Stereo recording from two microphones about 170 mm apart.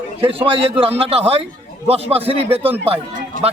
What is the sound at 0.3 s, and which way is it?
Speech, 35° right (ahead or behind).